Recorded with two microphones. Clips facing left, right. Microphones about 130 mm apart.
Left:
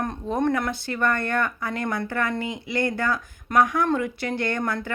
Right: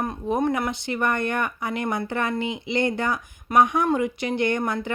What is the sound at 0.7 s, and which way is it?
Speech, 20° right (ahead or behind).